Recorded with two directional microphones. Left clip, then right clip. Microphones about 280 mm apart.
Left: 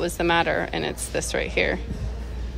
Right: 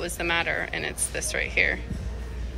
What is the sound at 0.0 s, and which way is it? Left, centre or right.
A woman's voice, centre.